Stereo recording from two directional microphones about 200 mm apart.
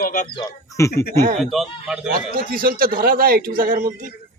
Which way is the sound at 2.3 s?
45° right (ahead or behind).